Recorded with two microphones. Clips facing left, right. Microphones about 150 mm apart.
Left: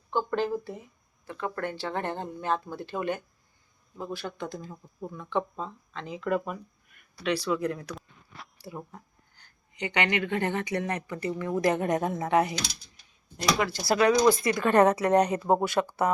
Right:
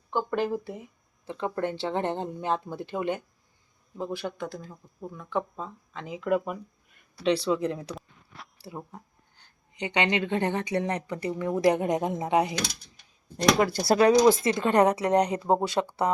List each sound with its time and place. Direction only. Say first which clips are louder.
0.1 s speech: even; 15° right (ahead or behind)
4.4 s speech: even; 5° right (ahead or behind)
7.2 s speech: right 3 dB; 25° right (ahead or behind)
7.9 s a sound: right 1 dB; centre (ahead or behind)
8.6 s speech: right 1 dB; 20° right (ahead or behind)
13.3 s speech: right 5 dB; 40° right (ahead or behind); by 16.0 s 20° right (ahead or behind)